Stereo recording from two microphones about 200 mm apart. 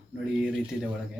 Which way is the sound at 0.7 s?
5° left (ahead or behind).